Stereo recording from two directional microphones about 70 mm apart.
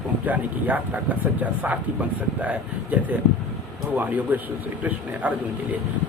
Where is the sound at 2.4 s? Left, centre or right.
Right.